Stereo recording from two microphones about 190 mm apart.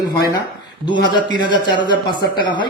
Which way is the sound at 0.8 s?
25° left (ahead or behind).